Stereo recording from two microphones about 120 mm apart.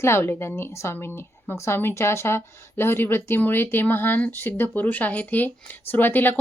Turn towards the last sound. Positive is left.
turn(degrees=15)  # may be behind; listen again after turning